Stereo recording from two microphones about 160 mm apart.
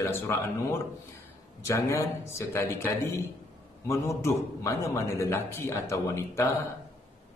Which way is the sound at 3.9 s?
15° left (ahead or behind).